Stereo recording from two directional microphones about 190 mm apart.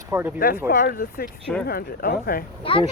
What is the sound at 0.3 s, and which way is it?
Speech, 50° left (ahead or behind).